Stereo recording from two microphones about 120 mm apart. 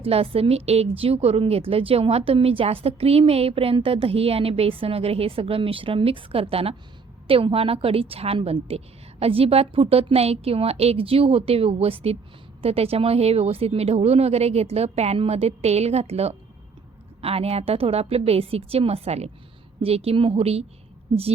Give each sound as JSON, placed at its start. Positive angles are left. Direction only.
{"t": 0.0, "sound": "a woman's voice", "side_deg": -55}